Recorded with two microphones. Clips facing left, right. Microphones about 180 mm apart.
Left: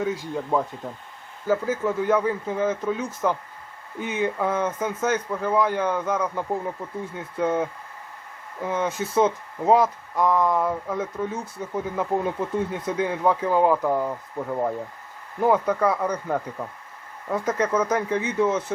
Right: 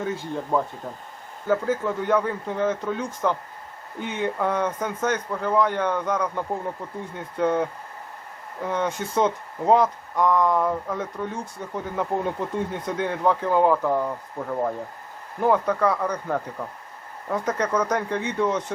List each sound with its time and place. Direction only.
0.5 s speech: centre (ahead or behind)
15.4 s speech: 5° left (ahead or behind)